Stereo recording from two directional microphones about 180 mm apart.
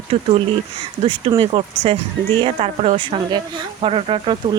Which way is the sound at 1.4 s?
30° right (ahead or behind).